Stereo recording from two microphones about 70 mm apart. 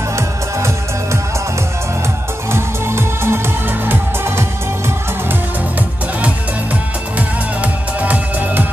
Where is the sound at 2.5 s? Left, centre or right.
Right.